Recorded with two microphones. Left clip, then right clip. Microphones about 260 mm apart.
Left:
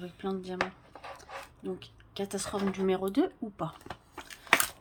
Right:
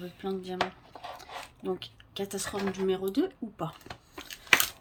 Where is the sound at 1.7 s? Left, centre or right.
Centre.